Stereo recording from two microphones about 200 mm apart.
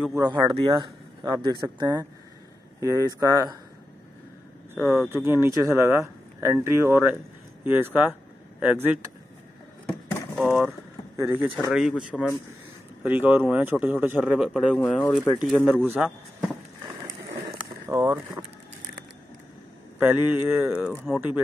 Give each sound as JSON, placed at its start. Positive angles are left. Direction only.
{"t": 0.1, "sound": "speech", "side_deg": -20}
{"t": 4.7, "sound": "speech", "side_deg": 0}
{"t": 9.8, "sound": "a sound", "side_deg": 0}
{"t": 11.5, "sound": "speech", "side_deg": 0}
{"t": 14.8, "sound": "speech", "side_deg": 20}
{"t": 15.8, "sound": "speech", "side_deg": 0}
{"t": 17.8, "sound": "speech", "side_deg": -15}
{"t": 20.0, "sound": "speech", "side_deg": -10}